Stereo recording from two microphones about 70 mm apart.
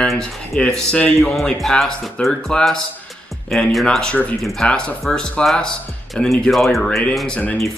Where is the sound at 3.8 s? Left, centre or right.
Centre.